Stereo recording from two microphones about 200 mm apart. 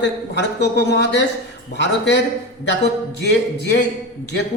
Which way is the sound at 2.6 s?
55° left (ahead or behind).